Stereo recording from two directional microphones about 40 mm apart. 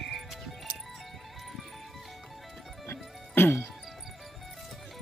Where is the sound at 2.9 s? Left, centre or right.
Left.